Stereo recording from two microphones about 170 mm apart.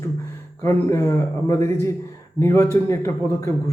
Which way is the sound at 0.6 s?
15° left (ahead or behind).